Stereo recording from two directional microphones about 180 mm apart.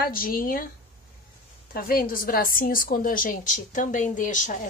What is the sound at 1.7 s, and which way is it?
A woman's voice, 55° left (ahead or behind).